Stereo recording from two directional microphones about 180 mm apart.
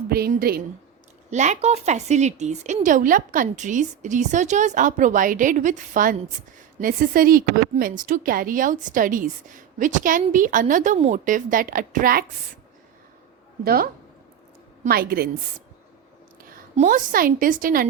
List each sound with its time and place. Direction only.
0.1 s a woman's voice: 55° right (ahead or behind)
1.3 s speech: 40° right (ahead or behind)
13.7 s a woman's voice: 55° right (ahead or behind)
16.7 s speech: 45° right (ahead or behind)